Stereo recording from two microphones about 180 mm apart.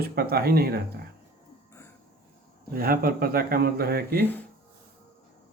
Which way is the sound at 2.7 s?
55° right (ahead or behind).